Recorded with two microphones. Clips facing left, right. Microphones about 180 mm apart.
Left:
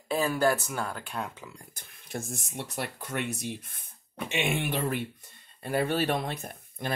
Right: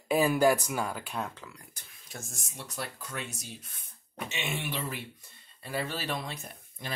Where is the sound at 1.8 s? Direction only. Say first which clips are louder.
Left 10 dB; 55° left (ahead or behind).